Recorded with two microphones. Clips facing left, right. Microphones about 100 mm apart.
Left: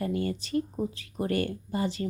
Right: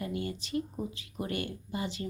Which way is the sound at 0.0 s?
40° left (ahead or behind).